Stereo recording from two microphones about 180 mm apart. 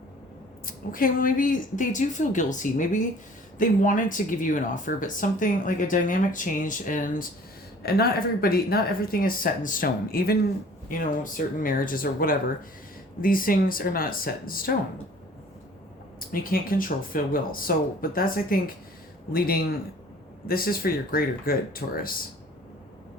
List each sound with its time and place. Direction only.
0.6 s speech: 50° left (ahead or behind)
7.8 s speech: 60° left (ahead or behind)
16.3 s speech: 50° left (ahead or behind)